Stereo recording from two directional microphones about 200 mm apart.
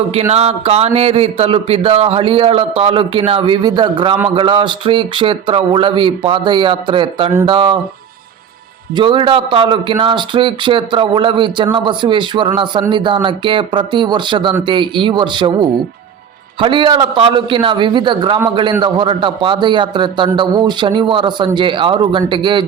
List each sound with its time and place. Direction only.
0.1 s a man's voice: 30° right (ahead or behind)
9.0 s a man's voice: 25° right (ahead or behind)